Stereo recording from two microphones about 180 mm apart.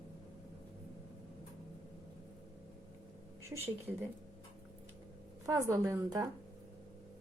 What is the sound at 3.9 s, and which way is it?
Speech, 10° right (ahead or behind).